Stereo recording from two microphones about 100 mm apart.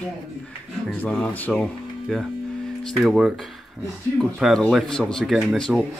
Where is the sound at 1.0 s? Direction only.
15° left (ahead or behind).